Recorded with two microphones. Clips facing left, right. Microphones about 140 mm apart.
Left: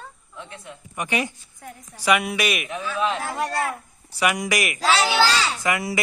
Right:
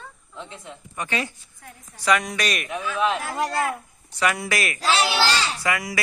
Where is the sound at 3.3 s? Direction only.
15° right (ahead or behind).